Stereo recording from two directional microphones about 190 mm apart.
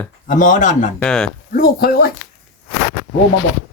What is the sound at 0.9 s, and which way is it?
Speech, 5° left (ahead or behind).